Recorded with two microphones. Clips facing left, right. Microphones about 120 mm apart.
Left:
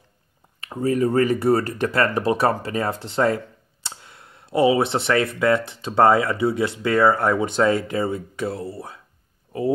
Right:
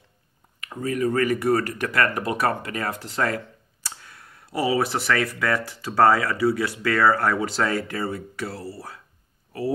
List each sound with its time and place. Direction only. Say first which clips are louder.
0.6 s speech: left 5 dB; 30° left (ahead or behind)